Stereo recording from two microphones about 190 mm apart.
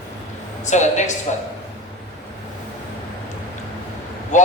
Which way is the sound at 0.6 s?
40° left (ahead or behind).